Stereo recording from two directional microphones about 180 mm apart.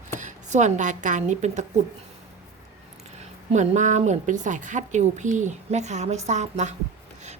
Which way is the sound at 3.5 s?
40° right (ahead or behind).